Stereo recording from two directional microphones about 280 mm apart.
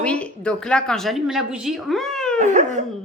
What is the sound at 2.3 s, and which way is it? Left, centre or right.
Speech, right.